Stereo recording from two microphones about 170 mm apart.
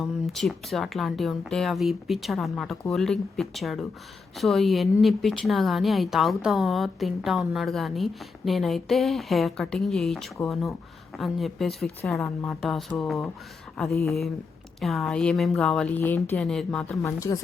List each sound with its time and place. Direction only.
0.0 s speech: centre (ahead or behind)
17.0 s speech: 15° left (ahead or behind)